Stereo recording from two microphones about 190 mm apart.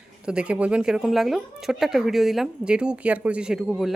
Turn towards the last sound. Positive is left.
turn(degrees=0)  # may be behind; listen again after turning